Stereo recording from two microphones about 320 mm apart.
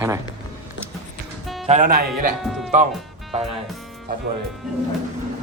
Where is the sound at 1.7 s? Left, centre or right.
Right.